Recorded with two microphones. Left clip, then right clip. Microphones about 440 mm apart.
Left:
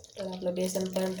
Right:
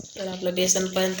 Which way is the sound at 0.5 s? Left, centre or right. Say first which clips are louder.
Right 10 dB; left.